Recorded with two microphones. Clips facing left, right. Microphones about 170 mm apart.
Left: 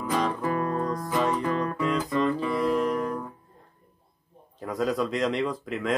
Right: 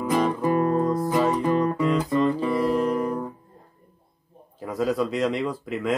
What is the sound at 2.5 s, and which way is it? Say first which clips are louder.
Music: right 2 dB; centre (ahead or behind).